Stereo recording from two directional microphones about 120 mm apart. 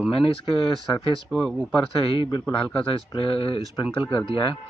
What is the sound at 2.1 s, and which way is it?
Speech, 45° left (ahead or behind).